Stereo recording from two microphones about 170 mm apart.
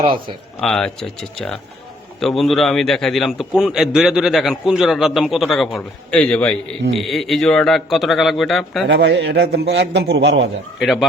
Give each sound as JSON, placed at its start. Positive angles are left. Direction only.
{"t": 0.0, "sound": "a man's voice", "side_deg": -30}
{"t": 0.6, "sound": "a man's voice", "side_deg": 5}
{"t": 8.9, "sound": "a man's voice", "side_deg": -90}
{"t": 10.8, "sound": "a man's voice", "side_deg": 0}